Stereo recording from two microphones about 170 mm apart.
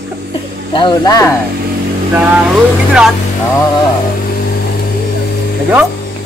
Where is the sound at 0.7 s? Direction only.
25° left (ahead or behind).